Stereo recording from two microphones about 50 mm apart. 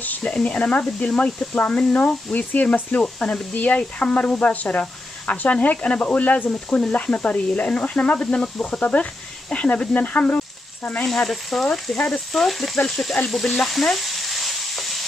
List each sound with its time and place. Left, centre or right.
0.2 s speech: left
9.5 s frying: left
11.1 s frying: centre
12.8 s speech: centre
13.3 s stir: centre